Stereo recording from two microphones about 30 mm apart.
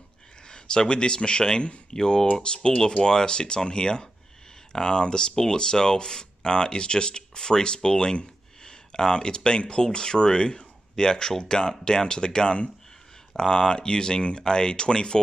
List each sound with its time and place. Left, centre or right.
0.5 s a man's voice: left